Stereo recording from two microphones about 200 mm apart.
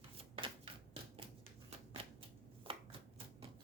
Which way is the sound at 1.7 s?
30° right (ahead or behind).